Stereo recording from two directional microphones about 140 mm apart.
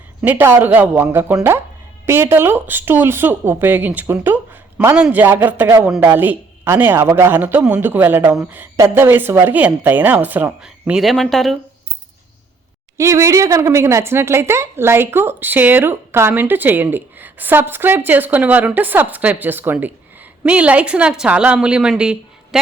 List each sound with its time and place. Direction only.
0.2 s a woman's voice: 15° right (ahead or behind)
13.0 s a woman's voice: 20° right (ahead or behind); by 22.6 s 5° right (ahead or behind)